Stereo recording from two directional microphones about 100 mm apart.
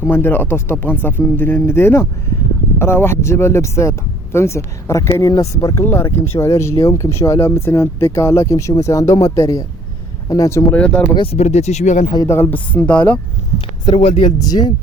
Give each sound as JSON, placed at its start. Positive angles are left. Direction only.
{"t": 0.0, "sound": "speech", "side_deg": 20}
{"t": 10.7, "sound": "speech", "side_deg": 10}
{"t": 11.3, "sound": "speech", "side_deg": 90}
{"t": 12.3, "sound": "speech", "side_deg": 20}
{"t": 13.8, "sound": "speech", "side_deg": 70}
{"t": 14.3, "sound": "speech", "side_deg": 40}